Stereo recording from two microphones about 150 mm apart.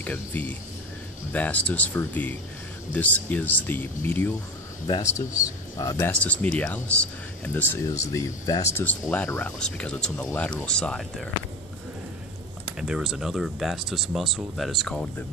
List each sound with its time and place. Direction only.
0.0 s speech: 10° left (ahead or behind)
6.1 s speech: 10° left (ahead or behind)
12.7 s speech: 5° right (ahead or behind)